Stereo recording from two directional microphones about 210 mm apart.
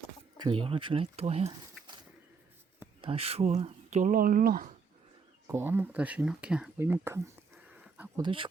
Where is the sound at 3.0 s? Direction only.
30° right (ahead or behind).